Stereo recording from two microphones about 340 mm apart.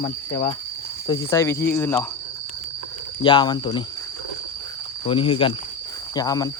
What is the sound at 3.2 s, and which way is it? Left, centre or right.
Speech, centre.